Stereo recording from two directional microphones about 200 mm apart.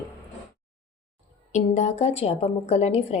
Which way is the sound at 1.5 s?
35° left (ahead or behind).